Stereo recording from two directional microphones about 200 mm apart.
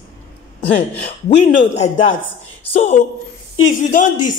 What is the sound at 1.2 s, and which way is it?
Speech, 35° left (ahead or behind).